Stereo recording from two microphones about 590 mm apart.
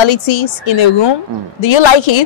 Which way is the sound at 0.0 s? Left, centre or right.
Left.